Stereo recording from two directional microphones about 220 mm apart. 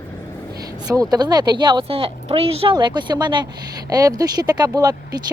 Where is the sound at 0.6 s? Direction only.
15° right (ahead or behind).